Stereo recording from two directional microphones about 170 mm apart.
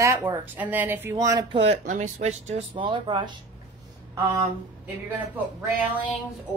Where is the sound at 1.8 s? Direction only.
45° right (ahead or behind); by 3.4 s 25° right (ahead or behind).